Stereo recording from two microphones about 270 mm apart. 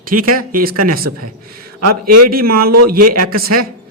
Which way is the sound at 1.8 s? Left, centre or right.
Right.